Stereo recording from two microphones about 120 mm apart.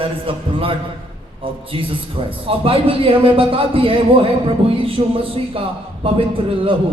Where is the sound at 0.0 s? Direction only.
50° right (ahead or behind).